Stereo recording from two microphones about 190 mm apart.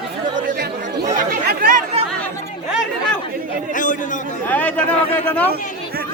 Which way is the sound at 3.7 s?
45° left (ahead or behind).